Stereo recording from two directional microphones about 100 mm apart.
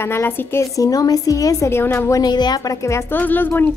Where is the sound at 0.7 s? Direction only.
35° left (ahead or behind).